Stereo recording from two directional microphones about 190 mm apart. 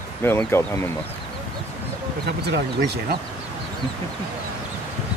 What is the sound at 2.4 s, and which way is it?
Speech, 60° right (ahead or behind).